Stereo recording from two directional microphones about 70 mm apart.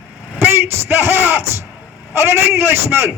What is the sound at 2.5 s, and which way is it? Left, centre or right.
Speech, right.